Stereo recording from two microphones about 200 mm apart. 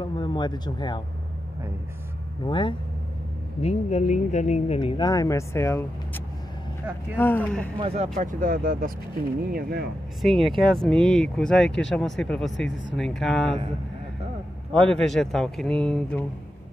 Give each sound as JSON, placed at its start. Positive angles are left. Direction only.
{"t": 0.0, "sound": "speech", "side_deg": 20}
{"t": 2.4, "sound": "speech", "side_deg": 25}
{"t": 3.6, "sound": "speech", "side_deg": 35}
{"t": 7.8, "sound": "speech", "side_deg": -30}
{"t": 10.2, "sound": "speech", "side_deg": 0}
{"t": 14.9, "sound": "speech", "side_deg": 5}